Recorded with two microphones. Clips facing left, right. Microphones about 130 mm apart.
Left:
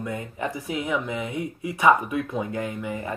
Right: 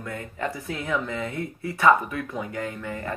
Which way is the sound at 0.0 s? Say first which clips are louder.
Left 1 dB; 20° left (ahead or behind).